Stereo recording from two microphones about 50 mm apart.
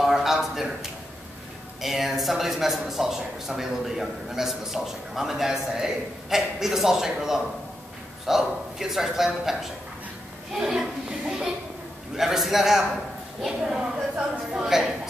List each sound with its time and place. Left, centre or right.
0.0 s a sound: centre
1.8 s a man's voice: centre
10.6 s chuckle: centre
12.2 s a man's voice: centre